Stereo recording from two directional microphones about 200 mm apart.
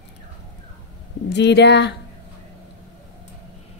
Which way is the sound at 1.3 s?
60° left (ahead or behind).